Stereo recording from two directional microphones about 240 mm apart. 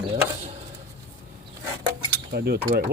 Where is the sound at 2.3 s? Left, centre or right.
Right.